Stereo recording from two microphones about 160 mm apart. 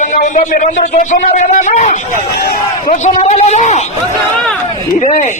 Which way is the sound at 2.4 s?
75° left (ahead or behind).